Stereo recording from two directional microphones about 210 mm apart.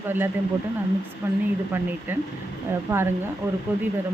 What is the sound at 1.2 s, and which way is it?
Speech, 10° right (ahead or behind).